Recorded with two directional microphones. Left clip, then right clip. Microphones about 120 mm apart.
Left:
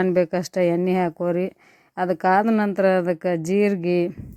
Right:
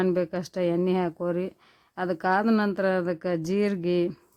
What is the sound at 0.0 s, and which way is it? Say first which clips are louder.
Speech: left 6 dB; 40° left (ahead or behind).